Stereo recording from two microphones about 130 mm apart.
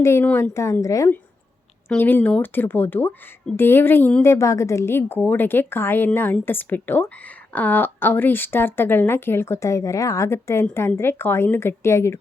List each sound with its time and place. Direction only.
0.0 s a woman's voice: 20° left (ahead or behind)